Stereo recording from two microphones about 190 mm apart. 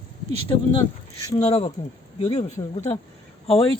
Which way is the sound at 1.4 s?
35° left (ahead or behind).